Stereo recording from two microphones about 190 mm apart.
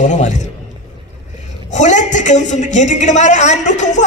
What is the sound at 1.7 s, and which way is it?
A woman's voice, 40° left (ahead or behind).